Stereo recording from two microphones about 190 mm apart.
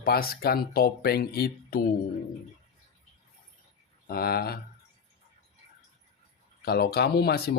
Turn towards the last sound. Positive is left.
turn(degrees=55)  # may be behind; listen again after turning